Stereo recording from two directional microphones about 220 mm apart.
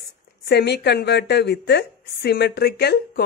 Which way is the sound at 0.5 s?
50° left (ahead or behind).